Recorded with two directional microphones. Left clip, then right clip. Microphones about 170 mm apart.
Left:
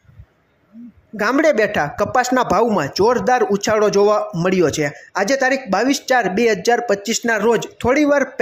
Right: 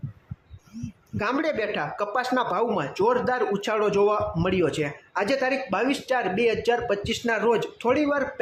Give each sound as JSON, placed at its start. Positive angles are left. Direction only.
{"t": 1.1, "sound": "speech", "side_deg": 35}